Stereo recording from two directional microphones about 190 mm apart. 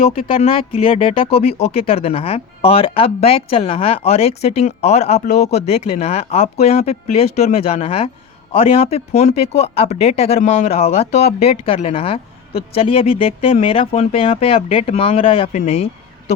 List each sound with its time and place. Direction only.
0.2 s speech: 30° left (ahead or behind)